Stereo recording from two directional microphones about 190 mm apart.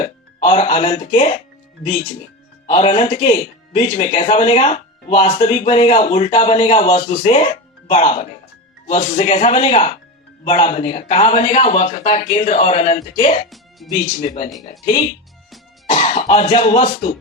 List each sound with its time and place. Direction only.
0.0 s speech: 30° left (ahead or behind)
2.6 s speech: 30° left (ahead or behind)
13.5 s music: centre (ahead or behind)
14.6 s speech: 35° left (ahead or behind)